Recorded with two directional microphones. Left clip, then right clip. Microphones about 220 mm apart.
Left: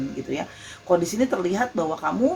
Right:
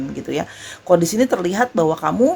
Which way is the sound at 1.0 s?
50° right (ahead or behind).